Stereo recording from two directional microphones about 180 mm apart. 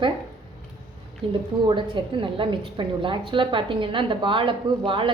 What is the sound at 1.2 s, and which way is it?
A woman's voice, 30° right (ahead or behind).